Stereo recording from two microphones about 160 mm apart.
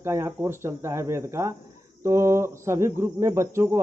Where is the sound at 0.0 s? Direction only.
20° right (ahead or behind).